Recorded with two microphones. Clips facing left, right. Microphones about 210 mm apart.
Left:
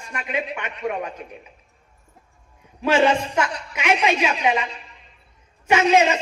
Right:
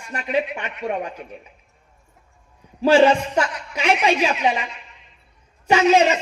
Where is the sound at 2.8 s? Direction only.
35° right (ahead or behind).